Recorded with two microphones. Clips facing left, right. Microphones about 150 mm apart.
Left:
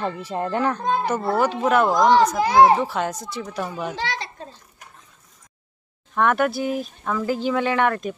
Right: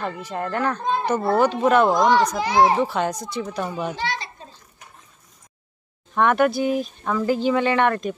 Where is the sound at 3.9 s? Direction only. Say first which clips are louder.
Even; 90° left.